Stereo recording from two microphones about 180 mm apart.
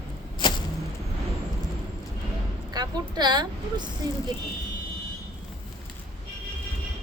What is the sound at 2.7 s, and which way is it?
A woman's voice, 25° right (ahead or behind).